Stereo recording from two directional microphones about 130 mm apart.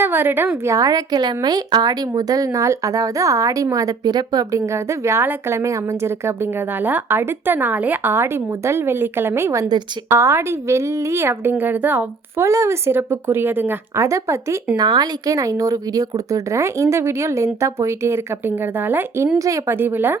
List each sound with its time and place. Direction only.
0.0 s a woman's voice: 15° right (ahead or behind)